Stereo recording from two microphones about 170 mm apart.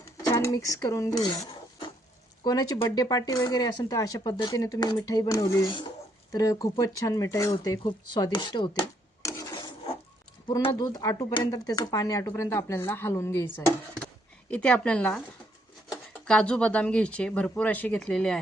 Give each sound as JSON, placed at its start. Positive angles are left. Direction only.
{"t": 0.3, "sound": "speech", "side_deg": 20}
{"t": 7.9, "sound": "rub", "side_deg": 25}
{"t": 10.5, "sound": "speech", "side_deg": 20}
{"t": 16.2, "sound": "speech", "side_deg": 5}